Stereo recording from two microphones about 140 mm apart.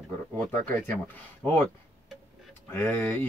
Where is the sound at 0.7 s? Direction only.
10° left (ahead or behind).